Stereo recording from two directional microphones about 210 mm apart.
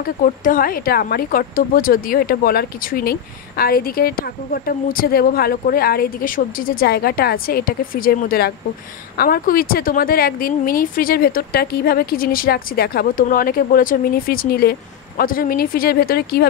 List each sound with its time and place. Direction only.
0.0 s speech: 40° left (ahead or behind)